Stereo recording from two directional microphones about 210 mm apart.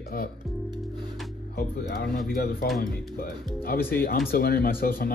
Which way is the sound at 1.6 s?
50° left (ahead or behind).